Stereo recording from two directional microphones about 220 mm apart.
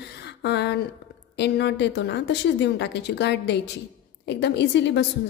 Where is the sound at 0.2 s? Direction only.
50° left (ahead or behind).